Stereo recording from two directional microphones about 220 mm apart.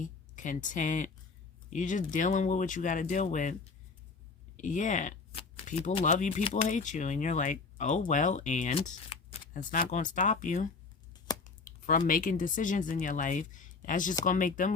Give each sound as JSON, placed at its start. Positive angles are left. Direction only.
{"t": 0.0, "sound": "speech", "side_deg": 35}
{"t": 9.5, "sound": "speech", "side_deg": 35}